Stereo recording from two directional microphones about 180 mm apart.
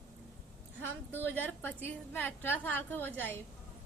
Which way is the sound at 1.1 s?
10° left (ahead or behind).